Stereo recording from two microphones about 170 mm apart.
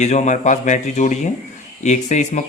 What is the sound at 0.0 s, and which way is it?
A man's voice, 45° left (ahead or behind).